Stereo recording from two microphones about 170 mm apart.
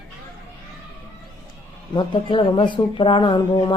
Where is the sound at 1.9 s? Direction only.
30° left (ahead or behind).